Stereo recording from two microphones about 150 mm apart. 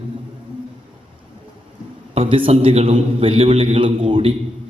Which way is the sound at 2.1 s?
35° right (ahead or behind).